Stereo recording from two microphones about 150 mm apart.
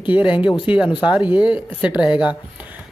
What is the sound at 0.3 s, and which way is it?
Speech, 35° left (ahead or behind).